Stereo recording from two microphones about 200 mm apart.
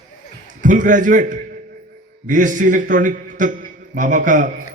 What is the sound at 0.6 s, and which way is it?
A man's voice, 40° right (ahead or behind).